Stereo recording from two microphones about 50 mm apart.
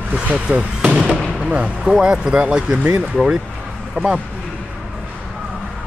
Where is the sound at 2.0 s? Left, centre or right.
Centre.